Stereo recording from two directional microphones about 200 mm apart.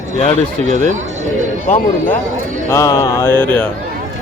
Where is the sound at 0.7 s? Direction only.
40° right (ahead or behind).